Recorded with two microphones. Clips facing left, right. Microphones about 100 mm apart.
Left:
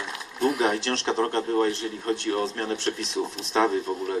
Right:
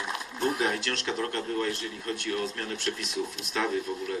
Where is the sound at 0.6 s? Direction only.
30° left (ahead or behind).